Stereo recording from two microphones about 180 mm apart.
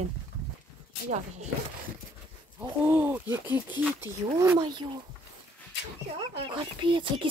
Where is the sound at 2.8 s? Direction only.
10° right (ahead or behind).